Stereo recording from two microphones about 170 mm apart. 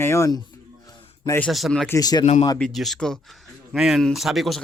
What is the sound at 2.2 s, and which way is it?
Speech, 40° left (ahead or behind).